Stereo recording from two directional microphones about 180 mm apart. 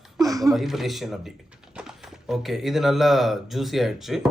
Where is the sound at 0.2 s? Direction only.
20° right (ahead or behind).